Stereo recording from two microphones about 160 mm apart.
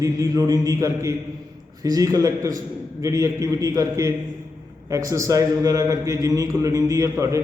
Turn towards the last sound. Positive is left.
turn(degrees=-20)  # may be behind; listen again after turning